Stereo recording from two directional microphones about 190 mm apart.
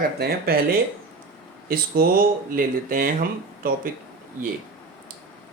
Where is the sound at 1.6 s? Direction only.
50° right (ahead or behind).